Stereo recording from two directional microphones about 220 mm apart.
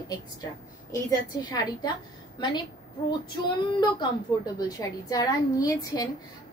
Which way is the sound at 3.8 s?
20° left (ahead or behind).